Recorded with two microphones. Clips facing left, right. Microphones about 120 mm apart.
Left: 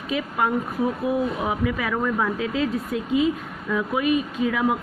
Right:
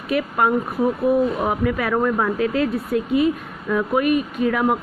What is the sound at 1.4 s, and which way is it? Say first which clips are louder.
Speech: right 3 dB; 50° right (ahead or behind).